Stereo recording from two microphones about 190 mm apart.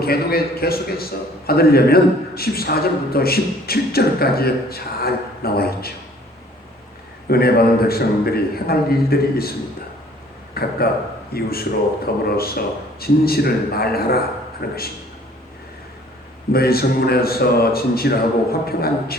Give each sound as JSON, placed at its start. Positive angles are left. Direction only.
{"t": 0.0, "sound": "a man's voice", "side_deg": 55}
{"t": 7.3, "sound": "a man's voice", "side_deg": 55}
{"t": 16.5, "sound": "a man's voice", "side_deg": 55}